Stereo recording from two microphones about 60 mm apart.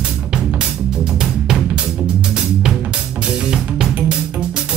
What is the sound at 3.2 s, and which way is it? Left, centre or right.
Music, centre.